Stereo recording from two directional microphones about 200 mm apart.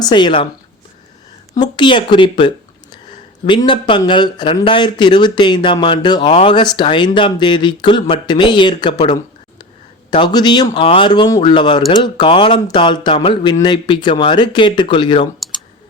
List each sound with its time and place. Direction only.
0.0 s speech: 20° left (ahead or behind)
1.5 s speech: 20° left (ahead or behind)
9.0 s a sound: 20° left (ahead or behind)
10.1 s speech: 20° left (ahead or behind)